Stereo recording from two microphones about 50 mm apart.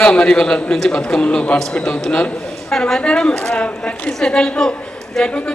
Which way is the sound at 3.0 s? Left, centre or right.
Centre.